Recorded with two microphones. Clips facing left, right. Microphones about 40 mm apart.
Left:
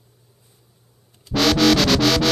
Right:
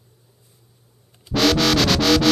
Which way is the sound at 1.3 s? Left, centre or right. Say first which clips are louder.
Left 1 dB; centre.